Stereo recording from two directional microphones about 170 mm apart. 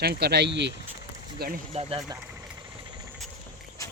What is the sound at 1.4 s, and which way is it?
Speech, 65° right (ahead or behind).